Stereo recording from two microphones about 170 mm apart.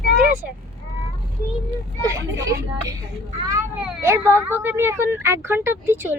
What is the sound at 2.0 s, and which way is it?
Speech, 20° right (ahead or behind).